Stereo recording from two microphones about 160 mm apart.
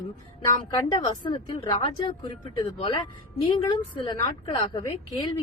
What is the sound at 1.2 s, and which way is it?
A woman's voice, 30° left (ahead or behind).